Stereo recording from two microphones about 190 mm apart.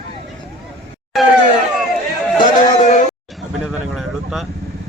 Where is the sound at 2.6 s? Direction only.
40° left (ahead or behind).